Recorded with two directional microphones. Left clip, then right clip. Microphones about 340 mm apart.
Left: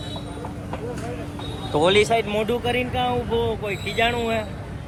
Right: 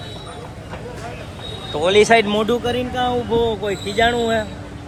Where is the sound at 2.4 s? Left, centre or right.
Centre.